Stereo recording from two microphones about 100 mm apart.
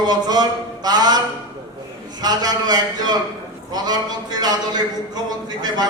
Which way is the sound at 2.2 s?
40° right (ahead or behind).